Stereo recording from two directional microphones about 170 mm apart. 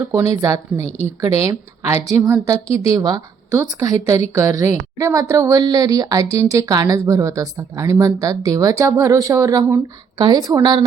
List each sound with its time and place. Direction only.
0.0 s a woman's voice: 15° right (ahead or behind)